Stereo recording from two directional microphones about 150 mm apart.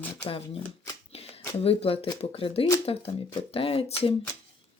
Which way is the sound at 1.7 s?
40° left (ahead or behind).